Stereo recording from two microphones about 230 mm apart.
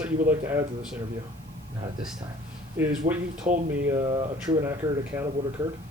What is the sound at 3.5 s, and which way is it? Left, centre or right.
Speech, right.